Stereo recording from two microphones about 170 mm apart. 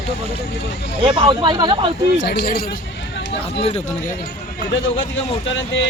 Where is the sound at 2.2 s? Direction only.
70° left (ahead or behind).